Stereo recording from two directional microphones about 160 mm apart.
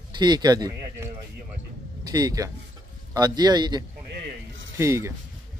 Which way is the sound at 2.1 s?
25° right (ahead or behind).